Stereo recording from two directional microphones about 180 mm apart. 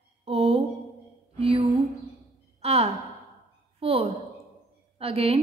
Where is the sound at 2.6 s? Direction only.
35° right (ahead or behind).